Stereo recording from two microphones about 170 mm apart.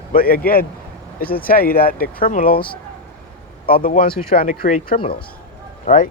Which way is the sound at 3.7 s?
55° left (ahead or behind).